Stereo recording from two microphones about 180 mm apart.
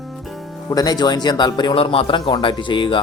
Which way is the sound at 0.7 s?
20° left (ahead or behind).